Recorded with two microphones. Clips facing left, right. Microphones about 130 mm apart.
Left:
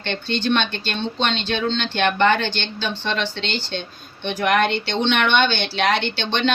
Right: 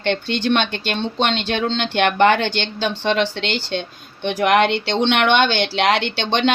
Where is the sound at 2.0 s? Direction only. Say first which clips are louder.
Right 3 dB; 70° right (ahead or behind).